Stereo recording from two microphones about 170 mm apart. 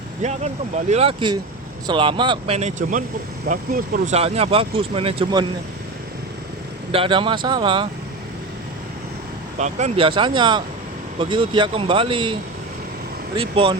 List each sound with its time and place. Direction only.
0.2 s a man's voice: 40° right (ahead or behind)
2.6 s speech: 40° right (ahead or behind)
3.4 s speech: 60° right (ahead or behind)
4.1 s a man's voice: 35° right (ahead or behind)
6.9 s a man's voice: 30° right (ahead or behind)
9.6 s speech: 40° right (ahead or behind)
10.1 s a man's voice: 30° right (ahead or behind)